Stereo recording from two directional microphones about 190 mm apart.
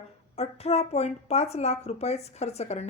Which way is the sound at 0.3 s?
35° left (ahead or behind).